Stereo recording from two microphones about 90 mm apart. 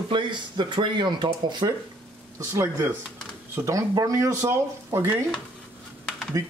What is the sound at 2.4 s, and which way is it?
Speech, 30° right (ahead or behind).